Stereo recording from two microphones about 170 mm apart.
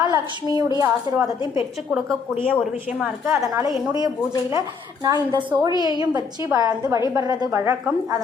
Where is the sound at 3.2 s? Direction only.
15° right (ahead or behind).